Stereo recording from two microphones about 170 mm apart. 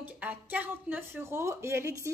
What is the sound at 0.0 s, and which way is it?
A woman's voice, 10° right (ahead or behind).